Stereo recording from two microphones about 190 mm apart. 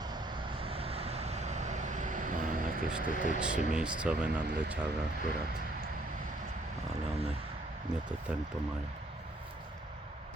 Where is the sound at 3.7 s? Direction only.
5° right (ahead or behind).